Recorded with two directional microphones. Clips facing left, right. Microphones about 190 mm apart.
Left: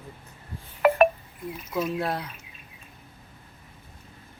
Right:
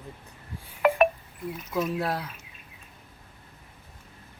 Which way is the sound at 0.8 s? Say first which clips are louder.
Left 2 dB; 5° left (ahead or behind).